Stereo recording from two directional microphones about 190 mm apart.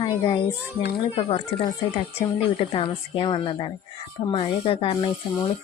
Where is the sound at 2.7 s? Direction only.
25° left (ahead or behind).